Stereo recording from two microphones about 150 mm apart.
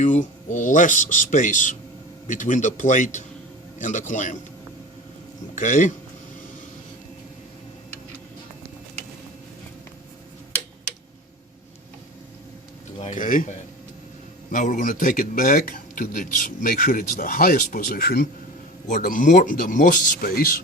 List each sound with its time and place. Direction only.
0.0 s speech: 55° left (ahead or behind)
5.5 s speech: 60° left (ahead or behind)
13.1 s speech: 65° left (ahead or behind)
14.5 s speech: 60° left (ahead or behind); by 18.3 s 90° left
18.9 s speech: 60° left (ahead or behind); by 20.6 s 80° left